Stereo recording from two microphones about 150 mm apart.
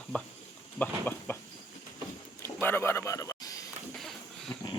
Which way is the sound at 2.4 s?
15° left (ahead or behind).